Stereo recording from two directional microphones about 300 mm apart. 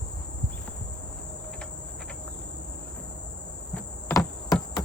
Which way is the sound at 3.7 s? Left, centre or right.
Centre.